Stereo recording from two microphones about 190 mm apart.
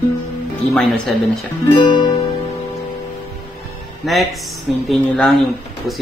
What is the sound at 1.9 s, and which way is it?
Music, 20° left (ahead or behind).